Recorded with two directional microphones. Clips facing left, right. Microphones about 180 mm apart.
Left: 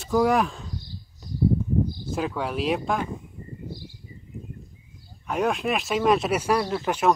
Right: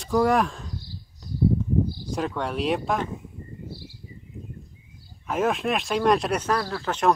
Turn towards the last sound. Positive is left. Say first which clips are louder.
# left 3 dB
turn(degrees=20)  # may be behind; listen again after turning